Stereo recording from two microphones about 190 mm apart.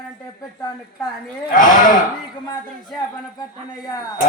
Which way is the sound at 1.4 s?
45° left (ahead or behind).